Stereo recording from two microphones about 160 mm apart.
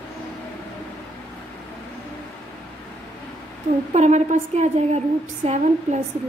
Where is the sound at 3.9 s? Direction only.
45° right (ahead or behind).